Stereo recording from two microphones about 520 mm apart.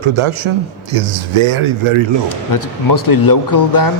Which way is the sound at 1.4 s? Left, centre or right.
Right.